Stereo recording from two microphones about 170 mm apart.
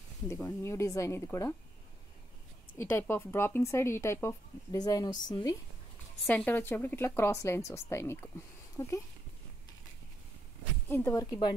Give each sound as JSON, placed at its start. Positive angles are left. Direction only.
{"t": 0.3, "sound": "speech", "side_deg": 15}
{"t": 2.8, "sound": "speech", "side_deg": 10}
{"t": 6.2, "sound": "a woman's voice", "side_deg": 10}
{"t": 10.9, "sound": "a woman's voice", "side_deg": 15}